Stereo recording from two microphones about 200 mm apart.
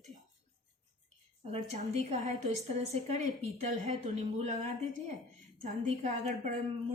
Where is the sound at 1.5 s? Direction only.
30° right (ahead or behind).